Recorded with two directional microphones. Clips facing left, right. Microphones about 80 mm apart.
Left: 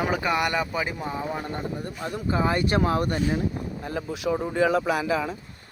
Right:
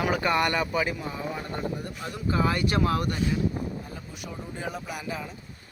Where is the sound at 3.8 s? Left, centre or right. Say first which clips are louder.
Left 10 dB; left.